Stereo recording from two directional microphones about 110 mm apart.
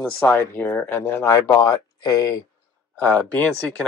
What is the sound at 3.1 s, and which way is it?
Speech, 10° left (ahead or behind).